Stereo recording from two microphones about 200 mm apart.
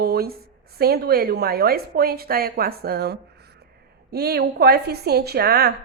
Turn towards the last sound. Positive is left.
turn(degrees=-50)  # may be behind; listen again after turning